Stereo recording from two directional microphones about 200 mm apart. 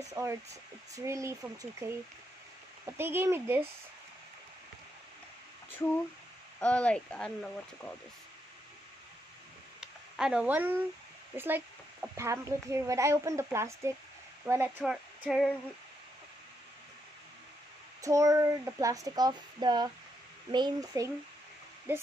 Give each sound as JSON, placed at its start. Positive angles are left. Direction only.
{"t": 0.1, "sound": "speech", "side_deg": -15}
{"t": 6.6, "sound": "speech", "side_deg": 5}
{"t": 9.8, "sound": "a sound", "side_deg": -5}
{"t": 11.3, "sound": "speech", "side_deg": -10}
{"t": 15.2, "sound": "speech", "side_deg": 0}
{"t": 18.0, "sound": "a child's voice", "side_deg": -15}